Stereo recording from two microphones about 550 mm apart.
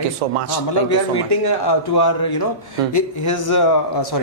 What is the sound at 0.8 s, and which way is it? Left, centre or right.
A man's voice, left.